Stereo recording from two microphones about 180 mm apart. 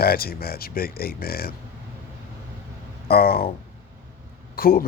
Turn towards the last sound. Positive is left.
turn(degrees=55)  # may be behind; listen again after turning